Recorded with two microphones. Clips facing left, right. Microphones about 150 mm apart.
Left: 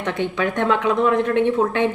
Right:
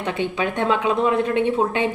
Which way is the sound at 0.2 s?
15° right (ahead or behind).